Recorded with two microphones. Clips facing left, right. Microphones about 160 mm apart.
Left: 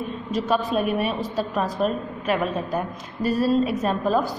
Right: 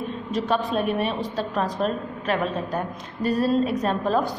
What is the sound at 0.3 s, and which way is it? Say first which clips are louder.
A woman's voice: left 1 dB; centre (ahead or behind).